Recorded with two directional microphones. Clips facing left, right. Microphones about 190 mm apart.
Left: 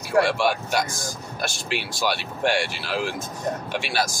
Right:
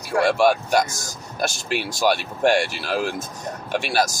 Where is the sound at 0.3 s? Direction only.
45° right (ahead or behind).